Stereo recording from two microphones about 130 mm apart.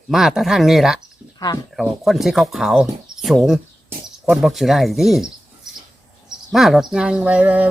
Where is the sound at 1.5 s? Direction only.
35° left (ahead or behind).